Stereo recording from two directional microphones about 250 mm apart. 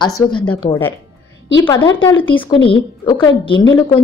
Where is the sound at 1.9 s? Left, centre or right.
Centre.